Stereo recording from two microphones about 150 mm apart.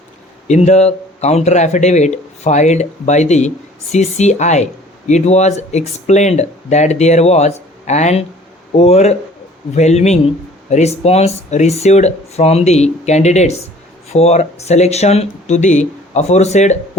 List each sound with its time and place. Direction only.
0.4 s speech: 50° left (ahead or behind)